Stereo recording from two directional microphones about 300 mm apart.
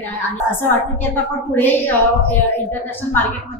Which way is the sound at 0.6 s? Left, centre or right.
Centre.